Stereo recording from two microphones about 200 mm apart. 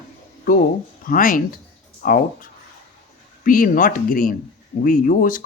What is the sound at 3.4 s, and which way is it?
Speech, 45° left (ahead or behind).